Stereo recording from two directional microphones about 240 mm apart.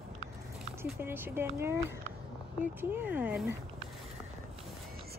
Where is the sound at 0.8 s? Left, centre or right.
Centre.